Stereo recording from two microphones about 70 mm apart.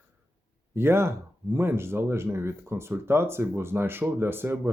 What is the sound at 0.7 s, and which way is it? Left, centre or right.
Speech, right.